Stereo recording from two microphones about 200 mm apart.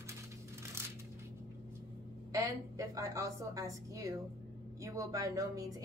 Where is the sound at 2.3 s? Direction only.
15° right (ahead or behind).